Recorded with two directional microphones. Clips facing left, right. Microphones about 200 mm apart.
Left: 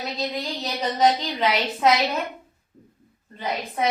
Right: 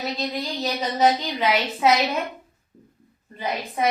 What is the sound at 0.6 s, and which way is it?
A woman's voice, 5° right (ahead or behind).